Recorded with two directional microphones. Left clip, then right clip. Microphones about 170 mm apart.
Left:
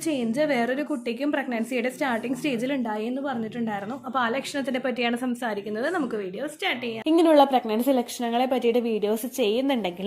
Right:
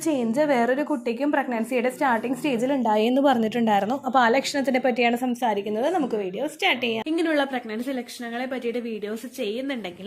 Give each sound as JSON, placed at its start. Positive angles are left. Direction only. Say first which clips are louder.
{"t": 0.1, "sound": "a woman's voice", "louder": "right 3 dB", "side_deg": 0}
{"t": 2.8, "sound": "a woman's voice", "louder": "right 9 dB", "side_deg": -30}
{"t": 4.5, "sound": "a woman's voice", "louder": "right 5 dB", "side_deg": -15}
{"t": 6.6, "sound": "a woman's voice", "louder": "right 5 dB", "side_deg": -15}
{"t": 7.1, "sound": "a woman's voice", "louder": "left 9 dB", "side_deg": 10}